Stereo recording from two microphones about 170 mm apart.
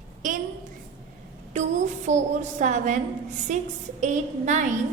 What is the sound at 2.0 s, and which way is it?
Speech, 45° right (ahead or behind).